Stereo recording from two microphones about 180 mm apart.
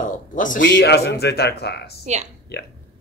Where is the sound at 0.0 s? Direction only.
45° left (ahead or behind).